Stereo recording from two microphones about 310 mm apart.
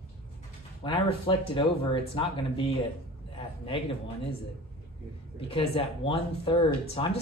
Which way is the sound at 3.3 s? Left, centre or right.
Centre.